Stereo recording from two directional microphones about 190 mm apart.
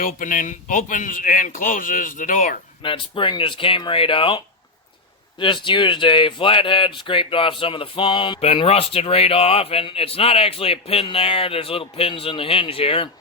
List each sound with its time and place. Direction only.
0.0 s speech: 45° left (ahead or behind)
2.8 s speech: 25° left (ahead or behind)